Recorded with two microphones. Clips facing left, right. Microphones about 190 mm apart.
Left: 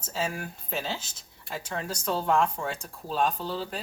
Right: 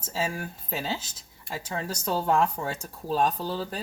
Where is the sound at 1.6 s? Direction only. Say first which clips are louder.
Even; 40° right (ahead or behind).